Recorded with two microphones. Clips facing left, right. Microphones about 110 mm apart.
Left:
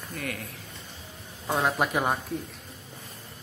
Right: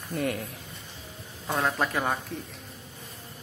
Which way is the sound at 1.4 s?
10° left (ahead or behind).